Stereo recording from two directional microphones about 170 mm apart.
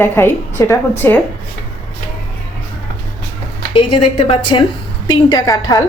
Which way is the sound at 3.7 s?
35° left (ahead or behind).